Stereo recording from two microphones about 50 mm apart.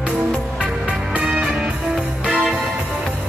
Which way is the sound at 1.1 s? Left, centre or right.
Centre.